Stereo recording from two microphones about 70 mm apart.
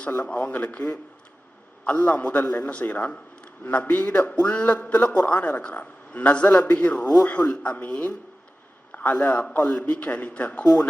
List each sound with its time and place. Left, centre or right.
0.2 s a man's voice: centre
1.9 s a man's voice: centre